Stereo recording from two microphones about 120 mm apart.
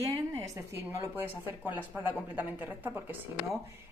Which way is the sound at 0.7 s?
20° right (ahead or behind).